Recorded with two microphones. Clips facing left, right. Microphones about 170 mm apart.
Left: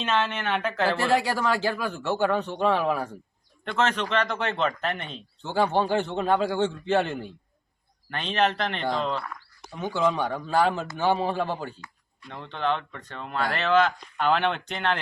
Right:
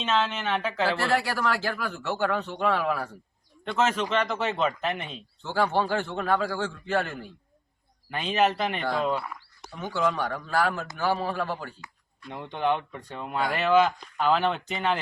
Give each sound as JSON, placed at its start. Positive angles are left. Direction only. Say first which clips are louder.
{"t": 0.0, "sound": "speech", "louder": "even", "side_deg": 0}
{"t": 0.9, "sound": "speech", "louder": "left 3 dB", "side_deg": 15}
{"t": 3.6, "sound": "speech", "louder": "even", "side_deg": -5}
{"t": 5.4, "sound": "a man's voice", "louder": "left 2 dB", "side_deg": 20}
{"t": 8.1, "sound": "speech", "louder": "right 1 dB", "side_deg": -5}
{"t": 9.7, "sound": "a man's voice", "louder": "left 2 dB", "side_deg": 15}
{"t": 12.3, "sound": "speech", "louder": "right 1 dB", "side_deg": -15}